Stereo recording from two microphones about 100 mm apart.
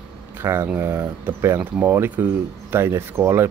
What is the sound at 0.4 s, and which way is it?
Speech, 25° right (ahead or behind).